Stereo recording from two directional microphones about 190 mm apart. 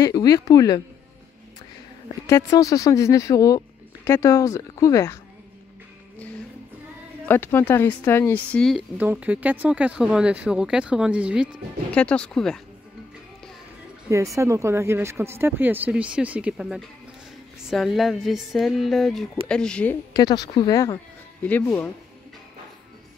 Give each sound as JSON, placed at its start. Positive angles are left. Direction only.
{"t": 0.0, "sound": "speech", "side_deg": 20}
{"t": 2.2, "sound": "speech", "side_deg": 15}
{"t": 7.2, "sound": "speech", "side_deg": 10}
{"t": 8.9, "sound": "speech", "side_deg": -10}
{"t": 11.9, "sound": "speech", "side_deg": 5}
{"t": 14.0, "sound": "speech", "side_deg": -15}
{"t": 20.1, "sound": "speech", "side_deg": 20}